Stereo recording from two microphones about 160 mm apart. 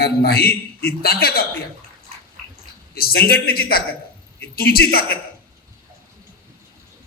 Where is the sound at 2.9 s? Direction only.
75° left (ahead or behind).